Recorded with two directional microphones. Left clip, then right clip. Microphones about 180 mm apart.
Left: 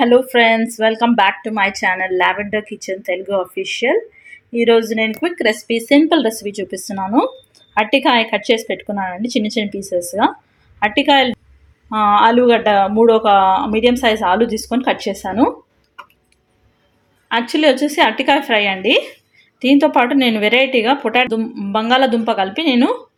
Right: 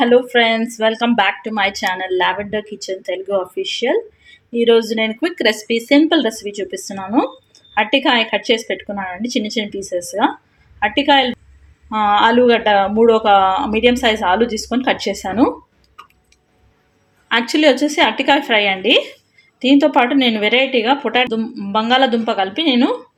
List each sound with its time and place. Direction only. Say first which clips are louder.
0.0 s speech: left 1 dB; 15° left (ahead or behind)
17.2 s speech: right 1 dB; centre (ahead or behind)